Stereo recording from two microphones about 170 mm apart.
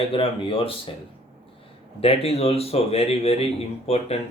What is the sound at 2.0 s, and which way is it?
Speech, 35° left (ahead or behind).